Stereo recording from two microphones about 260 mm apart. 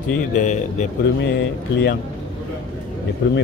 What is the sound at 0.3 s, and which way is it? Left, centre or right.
Speech, left.